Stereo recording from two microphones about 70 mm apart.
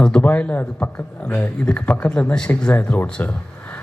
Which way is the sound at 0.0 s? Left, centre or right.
Centre.